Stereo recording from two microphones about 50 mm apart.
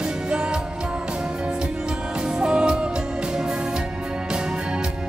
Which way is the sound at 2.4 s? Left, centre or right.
Centre.